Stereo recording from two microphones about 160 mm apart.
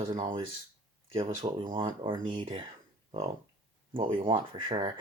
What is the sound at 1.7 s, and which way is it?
Speech, 30° right (ahead or behind).